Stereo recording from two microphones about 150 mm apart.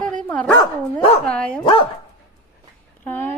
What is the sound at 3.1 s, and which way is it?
Speech, 10° left (ahead or behind).